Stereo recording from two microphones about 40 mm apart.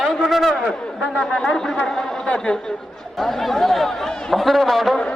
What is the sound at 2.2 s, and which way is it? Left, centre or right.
Speech, left.